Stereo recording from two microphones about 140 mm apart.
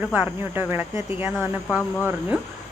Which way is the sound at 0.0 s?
10° right (ahead or behind).